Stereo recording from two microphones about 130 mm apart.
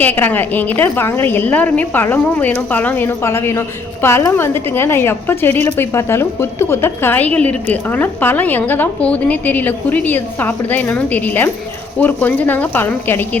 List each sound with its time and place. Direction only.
0.0 s a woman's voice: 15° left (ahead or behind)